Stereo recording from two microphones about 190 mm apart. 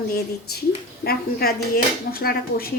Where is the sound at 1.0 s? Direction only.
55° left (ahead or behind).